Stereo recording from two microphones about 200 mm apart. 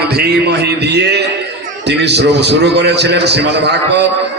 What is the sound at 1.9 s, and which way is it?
A man's voice, 55° right (ahead or behind).